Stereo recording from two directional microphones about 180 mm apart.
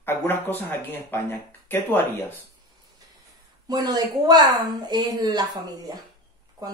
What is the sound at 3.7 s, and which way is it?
Speech, 20° right (ahead or behind).